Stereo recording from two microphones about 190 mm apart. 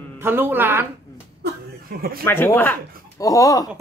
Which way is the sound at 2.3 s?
10° left (ahead or behind).